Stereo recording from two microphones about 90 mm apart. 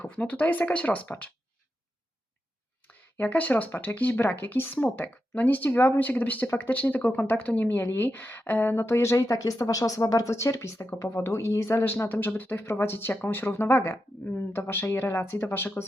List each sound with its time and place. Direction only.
0.0 s speech: 15° left (ahead or behind)
2.8 s speech: 15° left (ahead or behind)